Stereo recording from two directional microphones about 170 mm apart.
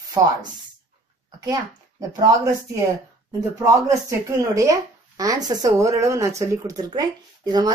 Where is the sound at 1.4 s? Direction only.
20° right (ahead or behind).